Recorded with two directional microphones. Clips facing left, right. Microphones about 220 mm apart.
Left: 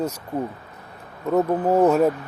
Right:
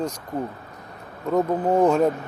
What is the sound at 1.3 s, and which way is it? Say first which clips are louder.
Speech: left 1 dB; 5° left (ahead or behind).